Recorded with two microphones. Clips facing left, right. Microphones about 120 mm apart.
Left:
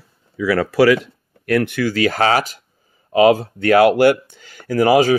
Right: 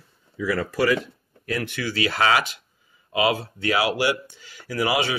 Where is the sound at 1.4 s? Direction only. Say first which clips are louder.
Left 10 dB; 55° left (ahead or behind).